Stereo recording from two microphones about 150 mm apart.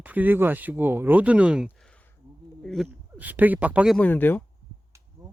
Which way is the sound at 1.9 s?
10° left (ahead or behind).